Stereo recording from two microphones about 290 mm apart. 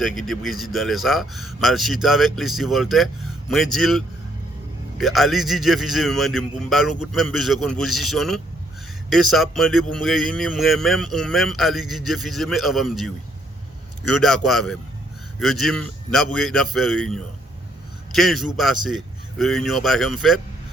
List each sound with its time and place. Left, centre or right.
0.0 s speech: centre
14.2 s speech: centre